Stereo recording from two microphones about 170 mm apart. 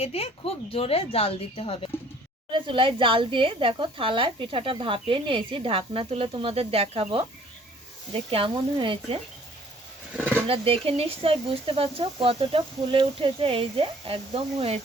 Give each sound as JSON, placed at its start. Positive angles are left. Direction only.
{"t": 0.0, "sound": "speech", "side_deg": 35}
{"t": 2.5, "sound": "speech", "side_deg": -30}
{"t": 10.4, "sound": "speech", "side_deg": -35}